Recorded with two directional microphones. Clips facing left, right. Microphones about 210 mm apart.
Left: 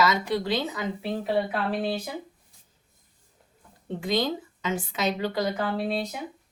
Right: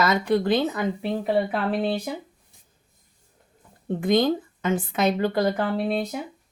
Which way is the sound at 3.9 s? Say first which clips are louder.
Right 6 dB; 55° right (ahead or behind).